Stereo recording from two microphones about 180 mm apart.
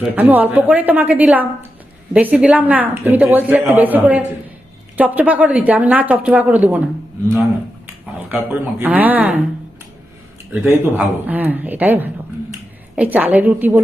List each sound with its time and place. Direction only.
0.0 s a woman's voice: 10° right (ahead or behind)
8.3 s a woman's voice: 10° right (ahead or behind)
10.6 s a woman's voice: 10° right (ahead or behind)